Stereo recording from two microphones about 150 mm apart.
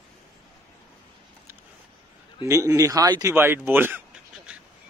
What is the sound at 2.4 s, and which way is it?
A man's voice, 20° right (ahead or behind).